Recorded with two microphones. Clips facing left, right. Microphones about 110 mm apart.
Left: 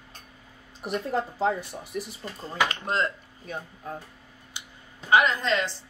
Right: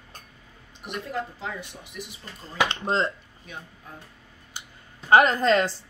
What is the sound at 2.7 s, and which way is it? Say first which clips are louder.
Speech: right 2 dB; 25° right (ahead or behind).